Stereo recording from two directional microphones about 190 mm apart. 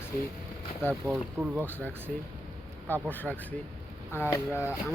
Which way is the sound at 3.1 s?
10° left (ahead or behind).